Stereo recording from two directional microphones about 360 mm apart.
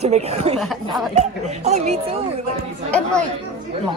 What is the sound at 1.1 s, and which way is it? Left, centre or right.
Speech, centre.